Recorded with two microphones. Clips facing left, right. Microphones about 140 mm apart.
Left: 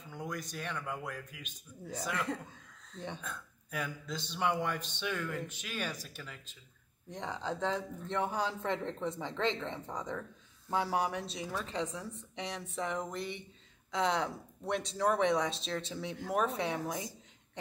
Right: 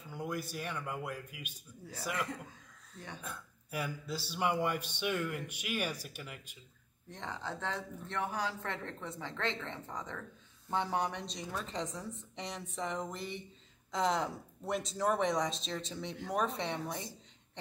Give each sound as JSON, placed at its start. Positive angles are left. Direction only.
{"t": 0.1, "sound": "speech", "side_deg": -5}
{"t": 3.2, "sound": "speech", "side_deg": -10}
{"t": 7.1, "sound": "a woman's voice", "side_deg": 15}